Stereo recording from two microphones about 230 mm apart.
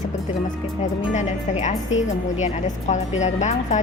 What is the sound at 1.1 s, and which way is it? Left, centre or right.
Speech, left.